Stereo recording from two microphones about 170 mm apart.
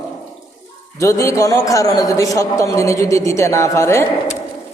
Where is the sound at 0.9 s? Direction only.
15° left (ahead or behind).